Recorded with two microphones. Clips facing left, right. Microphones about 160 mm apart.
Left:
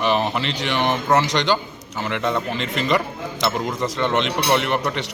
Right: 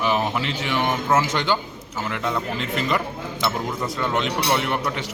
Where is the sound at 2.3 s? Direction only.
Centre (ahead or behind).